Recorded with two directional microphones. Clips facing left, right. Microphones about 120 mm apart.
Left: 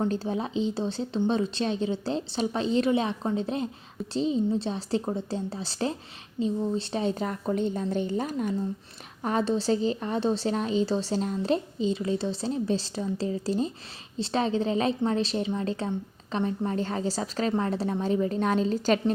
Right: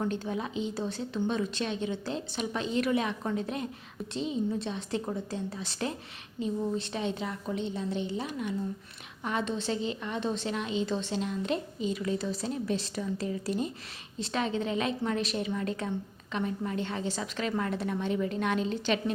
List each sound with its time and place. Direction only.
0.1 s a woman's voice: 30° left (ahead or behind)